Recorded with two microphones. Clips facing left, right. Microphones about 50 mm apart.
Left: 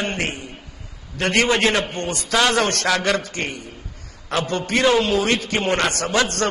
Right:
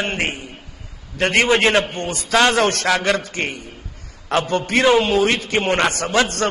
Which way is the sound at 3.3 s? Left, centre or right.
Right.